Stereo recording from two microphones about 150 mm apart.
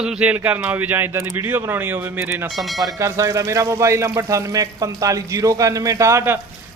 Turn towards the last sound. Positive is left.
turn(degrees=-20)  # may be behind; listen again after turning